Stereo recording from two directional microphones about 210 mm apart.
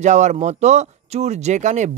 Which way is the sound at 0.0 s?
35° right (ahead or behind).